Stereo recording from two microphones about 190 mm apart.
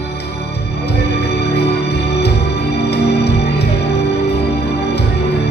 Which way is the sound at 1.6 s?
60° left (ahead or behind).